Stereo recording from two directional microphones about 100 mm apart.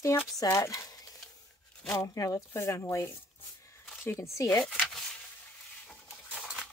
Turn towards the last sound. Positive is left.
turn(degrees=-10)  # may be behind; listen again after turning